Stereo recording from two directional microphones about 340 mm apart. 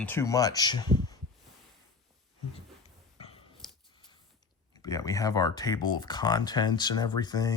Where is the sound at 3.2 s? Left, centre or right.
Centre.